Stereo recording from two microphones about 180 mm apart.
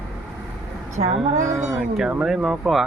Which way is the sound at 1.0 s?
35° right (ahead or behind).